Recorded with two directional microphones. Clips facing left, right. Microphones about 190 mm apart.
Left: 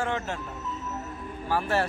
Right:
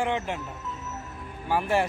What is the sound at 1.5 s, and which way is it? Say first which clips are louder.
Speech: right 1 dB; 15° right (ahead or behind).